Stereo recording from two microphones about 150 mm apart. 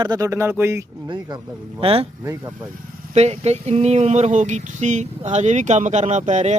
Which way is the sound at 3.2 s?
45° right (ahead or behind).